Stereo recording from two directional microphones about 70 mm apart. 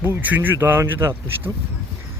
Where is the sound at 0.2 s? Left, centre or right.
Right.